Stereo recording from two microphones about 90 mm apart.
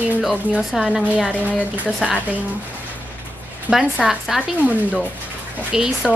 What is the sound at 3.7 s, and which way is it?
Speech, 15° right (ahead or behind).